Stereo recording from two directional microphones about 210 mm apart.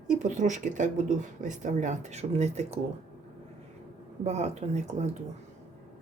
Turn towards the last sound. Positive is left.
turn(degrees=-30)  # may be behind; listen again after turning